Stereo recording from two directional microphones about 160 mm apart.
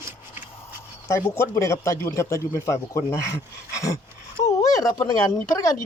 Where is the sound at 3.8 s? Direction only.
20° left (ahead or behind).